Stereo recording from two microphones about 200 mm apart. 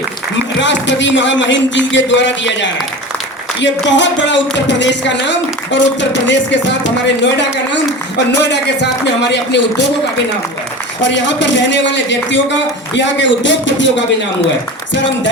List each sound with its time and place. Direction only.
0.6 s speech: 65° left (ahead or behind)
8.3 s speech: 60° left (ahead or behind)
11.0 s speech: 65° left (ahead or behind)